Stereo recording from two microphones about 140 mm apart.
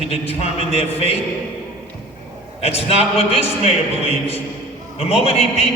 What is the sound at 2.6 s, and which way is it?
A man's voice, 45° left (ahead or behind).